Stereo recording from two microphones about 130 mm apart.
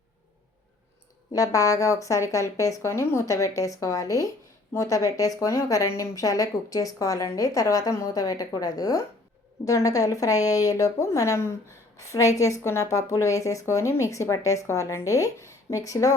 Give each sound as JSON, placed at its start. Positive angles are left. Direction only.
{"t": 1.3, "sound": "a woman's voice", "side_deg": 25}